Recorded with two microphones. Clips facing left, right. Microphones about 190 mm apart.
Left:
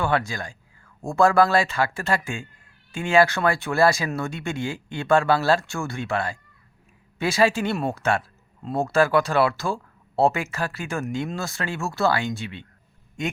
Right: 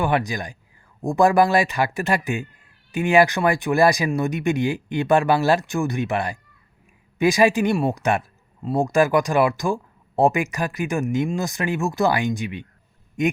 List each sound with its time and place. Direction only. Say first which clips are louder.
0.0 s a man's voice: right 2 dB; 15° right (ahead or behind)